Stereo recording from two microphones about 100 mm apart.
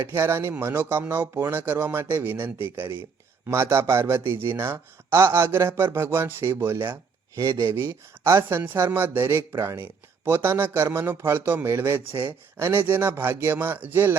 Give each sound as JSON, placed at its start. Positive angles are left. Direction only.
{"t": 0.0, "sound": "speech", "side_deg": -25}